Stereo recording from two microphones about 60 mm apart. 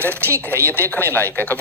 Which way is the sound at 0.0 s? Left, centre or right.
Left.